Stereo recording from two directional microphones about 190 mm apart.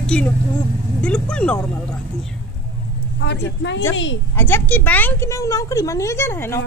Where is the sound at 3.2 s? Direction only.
65° left (ahead or behind).